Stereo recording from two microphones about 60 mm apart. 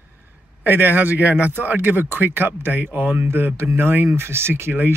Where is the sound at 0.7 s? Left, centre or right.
Right.